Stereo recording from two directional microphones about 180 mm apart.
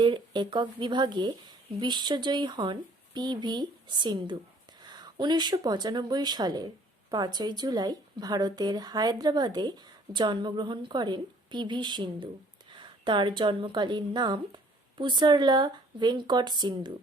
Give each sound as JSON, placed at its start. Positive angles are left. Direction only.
{"t": 0.0, "sound": "a woman's voice", "side_deg": -25}